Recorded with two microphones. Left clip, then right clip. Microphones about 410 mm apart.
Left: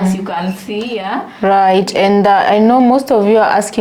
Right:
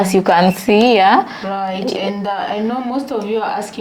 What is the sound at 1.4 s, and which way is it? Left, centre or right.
Speech, left.